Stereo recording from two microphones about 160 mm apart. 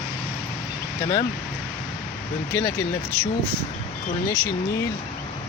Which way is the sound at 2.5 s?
15° left (ahead or behind).